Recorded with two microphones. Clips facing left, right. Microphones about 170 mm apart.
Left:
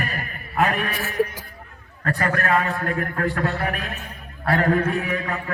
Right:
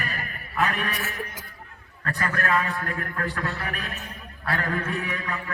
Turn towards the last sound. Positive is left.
turn(degrees=40)  # may be behind; listen again after turning